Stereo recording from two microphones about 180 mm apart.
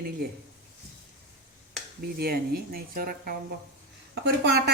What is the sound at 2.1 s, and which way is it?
Speech, 60° right (ahead or behind).